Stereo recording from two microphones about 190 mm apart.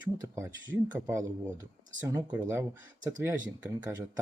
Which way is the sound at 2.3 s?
15° right (ahead or behind).